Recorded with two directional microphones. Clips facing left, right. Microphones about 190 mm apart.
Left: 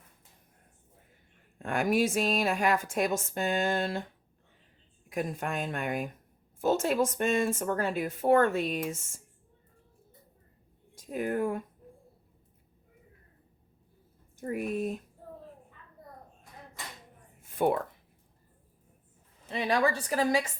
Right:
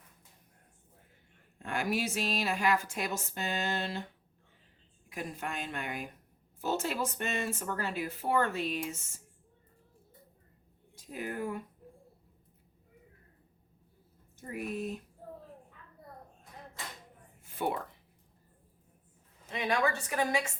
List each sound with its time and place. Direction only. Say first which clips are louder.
1.5 s speech: left 6 dB; 55° left (ahead or behind)
5.0 s speech: left 6 dB; 50° left (ahead or behind)
10.9 s speech: left 7 dB; 50° left (ahead or behind)
14.5 s speech: left 5 dB; 50° left (ahead or behind)
17.5 s a sound: left 7 dB; 50° left (ahead or behind)
19.5 s a woman's voice: left 3 dB; 30° left (ahead or behind)